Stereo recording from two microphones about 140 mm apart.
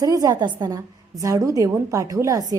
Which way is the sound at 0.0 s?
25° right (ahead or behind).